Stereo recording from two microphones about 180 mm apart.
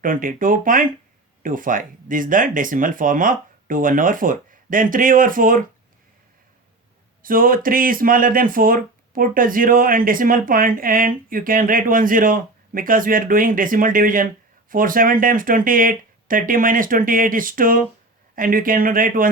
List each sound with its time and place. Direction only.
0.0 s speech: 50° right (ahead or behind)
7.2 s speech: 50° right (ahead or behind)